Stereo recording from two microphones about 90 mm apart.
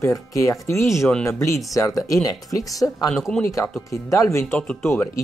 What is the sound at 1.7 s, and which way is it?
Speech, 40° left (ahead or behind).